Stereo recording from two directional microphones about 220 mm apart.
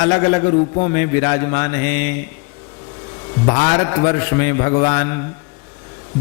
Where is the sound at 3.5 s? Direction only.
20° left (ahead or behind).